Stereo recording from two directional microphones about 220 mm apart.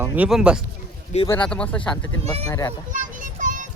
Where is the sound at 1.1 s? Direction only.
30° left (ahead or behind).